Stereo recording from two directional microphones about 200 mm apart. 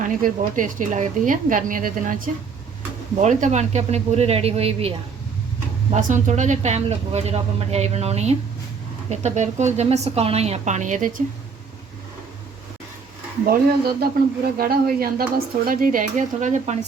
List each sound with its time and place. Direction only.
0.0 s speech: 40° right (ahead or behind)
3.2 s speech: 35° right (ahead or behind)
13.5 s speech: 50° right (ahead or behind)